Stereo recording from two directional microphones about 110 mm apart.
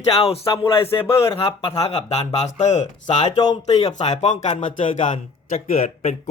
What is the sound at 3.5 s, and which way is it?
Speech, 75° left (ahead or behind).